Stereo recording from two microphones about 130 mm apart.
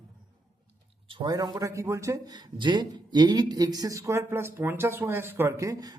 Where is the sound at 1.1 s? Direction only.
35° right (ahead or behind).